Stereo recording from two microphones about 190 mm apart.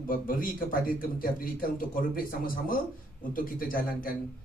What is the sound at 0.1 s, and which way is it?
Speech, 45° left (ahead or behind).